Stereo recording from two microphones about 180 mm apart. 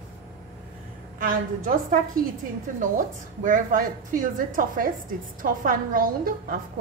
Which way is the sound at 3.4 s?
50° right (ahead or behind).